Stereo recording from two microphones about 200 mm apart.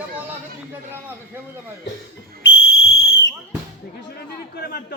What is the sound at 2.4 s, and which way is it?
Whistle, 75° left (ahead or behind).